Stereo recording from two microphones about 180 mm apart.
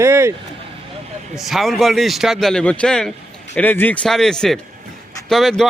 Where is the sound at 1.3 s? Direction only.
Centre (ahead or behind).